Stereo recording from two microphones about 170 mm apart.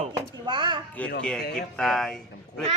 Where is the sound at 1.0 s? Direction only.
10° left (ahead or behind).